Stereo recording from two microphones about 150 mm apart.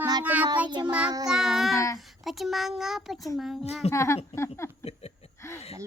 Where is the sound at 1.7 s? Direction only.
20° left (ahead or behind).